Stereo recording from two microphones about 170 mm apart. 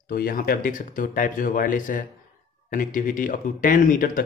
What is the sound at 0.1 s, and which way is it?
Speech, 60° left (ahead or behind).